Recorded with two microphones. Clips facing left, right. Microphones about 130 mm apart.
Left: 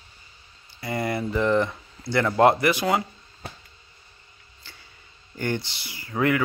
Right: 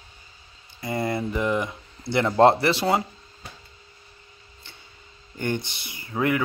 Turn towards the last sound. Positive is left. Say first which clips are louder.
# left 1 dB
turn(degrees=-25)  # may be behind; listen again after turning